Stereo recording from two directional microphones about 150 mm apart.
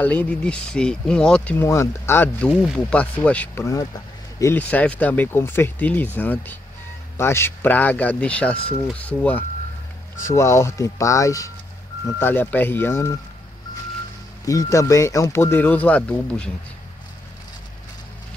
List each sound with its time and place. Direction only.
0.0 s speech: 10° left (ahead or behind)
14.4 s speech: 20° left (ahead or behind)